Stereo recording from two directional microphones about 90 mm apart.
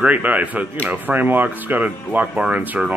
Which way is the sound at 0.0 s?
15° right (ahead or behind).